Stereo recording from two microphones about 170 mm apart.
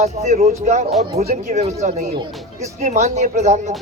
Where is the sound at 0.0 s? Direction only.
40° right (ahead or behind).